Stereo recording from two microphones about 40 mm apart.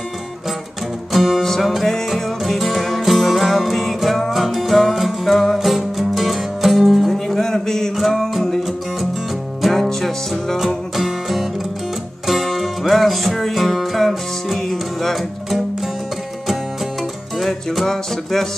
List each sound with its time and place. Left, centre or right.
1.1 s music: centre
7.1 s a sound: centre
8.1 s music: centre
17.4 s music: centre